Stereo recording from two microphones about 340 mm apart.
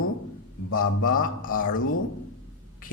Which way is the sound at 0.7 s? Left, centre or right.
Left.